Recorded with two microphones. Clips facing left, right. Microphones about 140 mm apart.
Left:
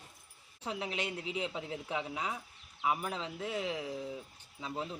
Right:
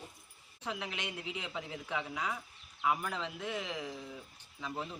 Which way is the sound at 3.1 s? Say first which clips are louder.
Left 1 dB; 30° left (ahead or behind).